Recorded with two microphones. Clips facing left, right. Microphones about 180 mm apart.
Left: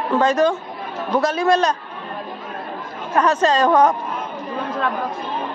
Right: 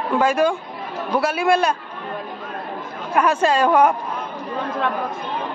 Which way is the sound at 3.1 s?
10° right (ahead or behind).